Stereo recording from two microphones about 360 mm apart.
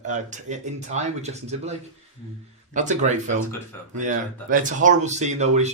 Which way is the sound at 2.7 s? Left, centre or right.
Centre.